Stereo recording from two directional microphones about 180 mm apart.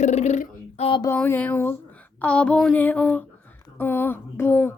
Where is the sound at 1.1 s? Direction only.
10° left (ahead or behind).